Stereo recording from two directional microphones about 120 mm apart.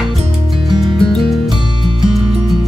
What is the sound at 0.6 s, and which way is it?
Music, 40° right (ahead or behind).